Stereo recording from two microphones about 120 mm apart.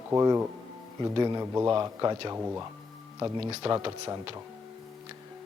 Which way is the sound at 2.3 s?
20° right (ahead or behind).